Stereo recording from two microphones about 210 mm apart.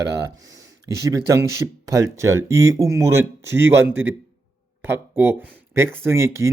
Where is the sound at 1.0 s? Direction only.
15° right (ahead or behind).